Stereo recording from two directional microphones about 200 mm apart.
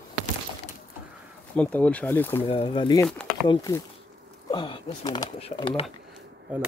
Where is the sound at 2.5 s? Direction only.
25° left (ahead or behind).